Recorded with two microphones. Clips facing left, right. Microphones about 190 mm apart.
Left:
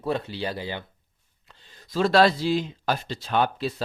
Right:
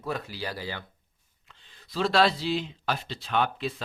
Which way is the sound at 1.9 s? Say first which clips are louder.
Left 4 dB; 45° left (ahead or behind).